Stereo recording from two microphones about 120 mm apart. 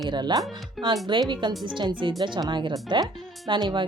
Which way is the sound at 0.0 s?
40° right (ahead or behind).